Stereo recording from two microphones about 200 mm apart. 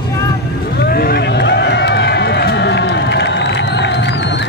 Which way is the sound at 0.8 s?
50° left (ahead or behind).